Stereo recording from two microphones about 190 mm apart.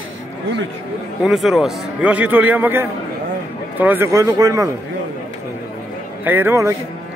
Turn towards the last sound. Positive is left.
turn(degrees=-15)  # may be behind; listen again after turning